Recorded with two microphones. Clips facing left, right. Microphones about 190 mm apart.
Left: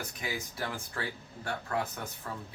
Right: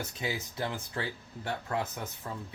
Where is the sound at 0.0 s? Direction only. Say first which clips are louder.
Right 2 dB; 25° right (ahead or behind).